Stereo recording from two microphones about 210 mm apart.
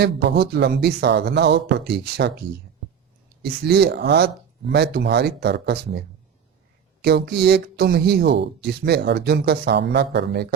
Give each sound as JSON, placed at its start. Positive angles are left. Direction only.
{"t": 0.0, "sound": "speech", "side_deg": -55}
{"t": 3.4, "sound": "speech", "side_deg": -50}
{"t": 7.0, "sound": "speech", "side_deg": -50}